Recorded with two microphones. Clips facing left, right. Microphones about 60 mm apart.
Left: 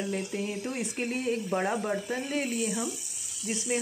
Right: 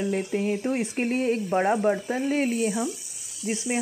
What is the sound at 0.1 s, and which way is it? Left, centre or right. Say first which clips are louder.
Speech: right 6 dB; right.